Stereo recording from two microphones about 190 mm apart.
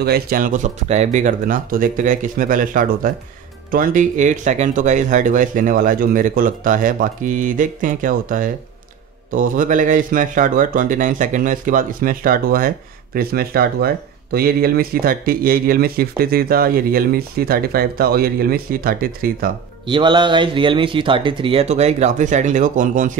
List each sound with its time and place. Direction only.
0.0 s speech: 50° right (ahead or behind)
19.9 s speech: 25° right (ahead or behind); by 23.1 s 40° right (ahead or behind)